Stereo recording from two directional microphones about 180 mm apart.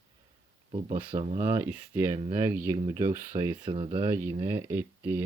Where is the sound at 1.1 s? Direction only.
30° right (ahead or behind).